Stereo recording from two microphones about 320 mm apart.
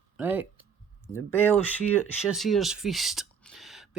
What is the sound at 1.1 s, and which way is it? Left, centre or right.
Speech, centre.